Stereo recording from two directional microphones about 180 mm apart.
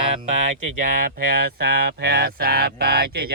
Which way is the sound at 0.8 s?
55° right (ahead or behind).